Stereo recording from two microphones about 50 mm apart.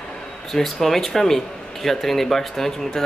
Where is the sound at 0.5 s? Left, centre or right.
Centre.